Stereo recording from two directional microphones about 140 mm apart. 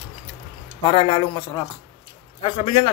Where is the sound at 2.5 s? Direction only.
35° left (ahead or behind).